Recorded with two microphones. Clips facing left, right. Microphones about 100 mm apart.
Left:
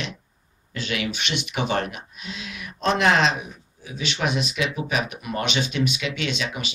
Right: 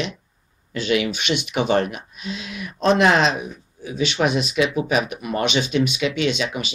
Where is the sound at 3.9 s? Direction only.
20° right (ahead or behind).